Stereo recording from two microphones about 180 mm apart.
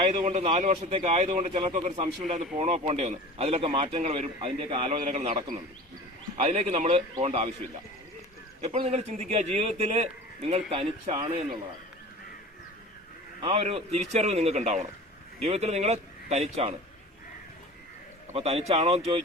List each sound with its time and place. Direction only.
0.0 s a man's voice: 35° right (ahead or behind)
4.9 s a man's voice: 40° right (ahead or behind)
6.4 s a man's voice: 40° right (ahead or behind)
8.6 s a man's voice: 35° right (ahead or behind)
13.4 s a man's voice: 35° right (ahead or behind)
18.3 s a man's voice: 35° right (ahead or behind)